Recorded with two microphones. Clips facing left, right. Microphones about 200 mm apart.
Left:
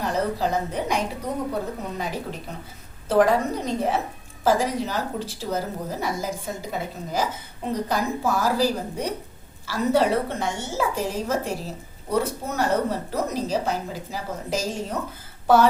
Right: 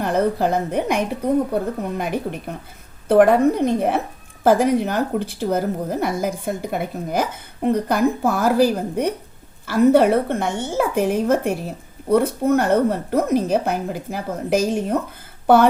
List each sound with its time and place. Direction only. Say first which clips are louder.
0.0 s a woman's voice: right 5 dB; 55° right (ahead or behind)